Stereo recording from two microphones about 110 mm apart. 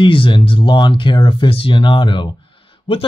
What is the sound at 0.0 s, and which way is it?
Speech, 50° left (ahead or behind).